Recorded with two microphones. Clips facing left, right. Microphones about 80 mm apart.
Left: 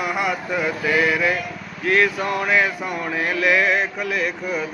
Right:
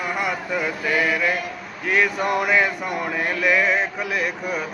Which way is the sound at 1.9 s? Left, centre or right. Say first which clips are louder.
Left 2 dB; centre.